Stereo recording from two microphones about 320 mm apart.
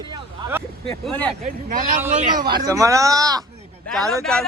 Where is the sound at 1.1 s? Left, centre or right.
Centre.